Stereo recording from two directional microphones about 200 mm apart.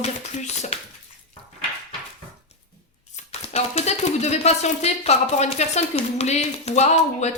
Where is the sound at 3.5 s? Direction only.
35° left (ahead or behind).